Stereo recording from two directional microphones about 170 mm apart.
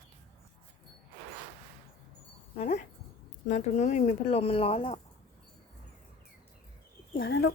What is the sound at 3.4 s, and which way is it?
Speech, 45° left (ahead or behind).